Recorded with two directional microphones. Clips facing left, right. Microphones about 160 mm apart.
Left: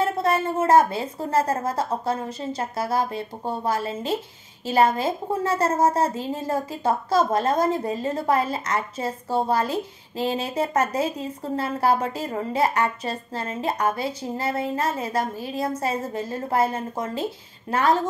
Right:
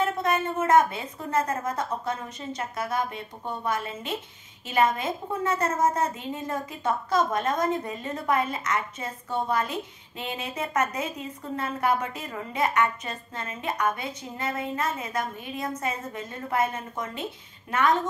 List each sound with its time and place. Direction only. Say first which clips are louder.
0.0 s a woman's voice: left 3 dB; 30° left (ahead or behind)